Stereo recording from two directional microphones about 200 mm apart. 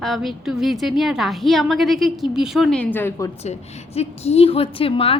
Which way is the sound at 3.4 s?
30° left (ahead or behind).